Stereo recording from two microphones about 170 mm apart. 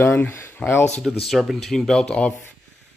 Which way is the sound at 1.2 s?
Centre (ahead or behind).